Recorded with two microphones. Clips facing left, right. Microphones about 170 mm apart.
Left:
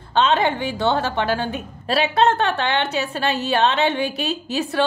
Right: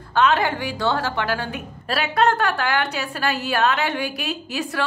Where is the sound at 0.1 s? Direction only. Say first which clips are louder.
Left 1 dB; 25° left (ahead or behind).